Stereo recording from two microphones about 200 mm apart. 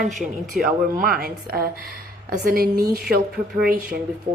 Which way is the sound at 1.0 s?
45° right (ahead or behind).